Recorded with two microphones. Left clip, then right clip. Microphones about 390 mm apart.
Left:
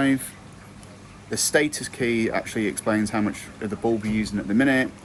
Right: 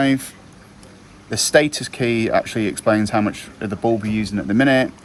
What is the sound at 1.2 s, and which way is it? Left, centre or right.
Speech, right.